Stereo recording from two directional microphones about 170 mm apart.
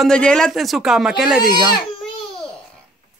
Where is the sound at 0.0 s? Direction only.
5° left (ahead or behind).